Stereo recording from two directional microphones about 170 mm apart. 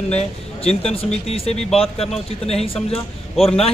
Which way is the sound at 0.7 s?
35° left (ahead or behind).